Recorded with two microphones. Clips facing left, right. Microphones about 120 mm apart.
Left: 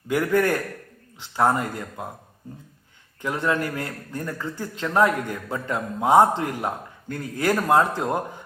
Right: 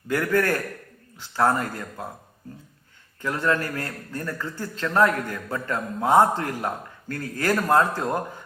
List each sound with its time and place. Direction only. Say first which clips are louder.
0.1 s a man's voice: left 1 dB; 15° left (ahead or behind)
3.2 s a man's voice: even; 15° left (ahead or behind)